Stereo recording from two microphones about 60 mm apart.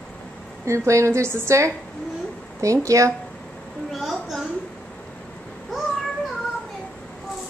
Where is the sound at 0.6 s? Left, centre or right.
Right.